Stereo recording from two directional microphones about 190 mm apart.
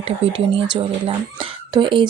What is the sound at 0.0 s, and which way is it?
Speech, 30° right (ahead or behind).